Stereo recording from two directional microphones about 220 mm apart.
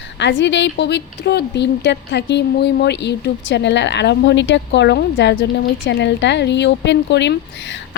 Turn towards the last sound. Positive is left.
turn(degrees=55)  # may be behind; listen again after turning